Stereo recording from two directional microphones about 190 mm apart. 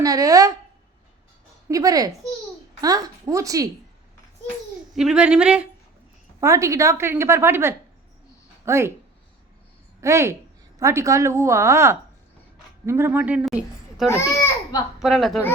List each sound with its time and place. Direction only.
0.0 s speech: 20° right (ahead or behind)
1.6 s speech: 20° right (ahead or behind)
4.9 s a woman's voice: 5° right (ahead or behind)
6.4 s a woman's voice: 15° right (ahead or behind)
10.0 s a woman's voice: 15° right (ahead or behind)
14.1 s speech: 15° left (ahead or behind)
15.0 s a woman's voice: centre (ahead or behind)